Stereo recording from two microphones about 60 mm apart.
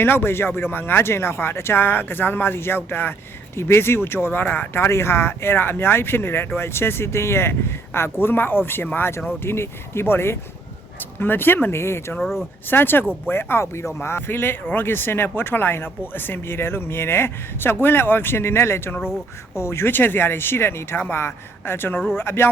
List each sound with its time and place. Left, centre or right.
0.0 s speech: left
12.2 s speech: centre
12.6 s speech: left